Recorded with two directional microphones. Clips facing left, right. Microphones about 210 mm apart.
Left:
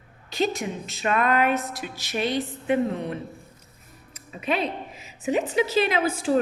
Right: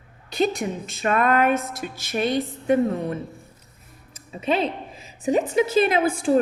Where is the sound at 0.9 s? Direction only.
45° right (ahead or behind).